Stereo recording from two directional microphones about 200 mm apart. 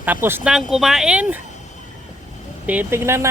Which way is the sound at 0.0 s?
10° right (ahead or behind).